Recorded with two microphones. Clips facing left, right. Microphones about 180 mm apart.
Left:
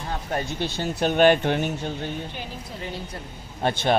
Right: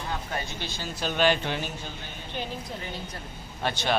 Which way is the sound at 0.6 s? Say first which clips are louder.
Left 8 dB; 60° left (ahead or behind).